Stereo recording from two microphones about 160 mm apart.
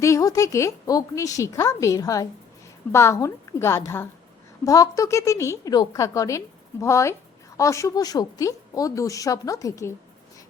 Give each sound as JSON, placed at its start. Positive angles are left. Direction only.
{"t": 0.0, "sound": "a woman's voice", "side_deg": 20}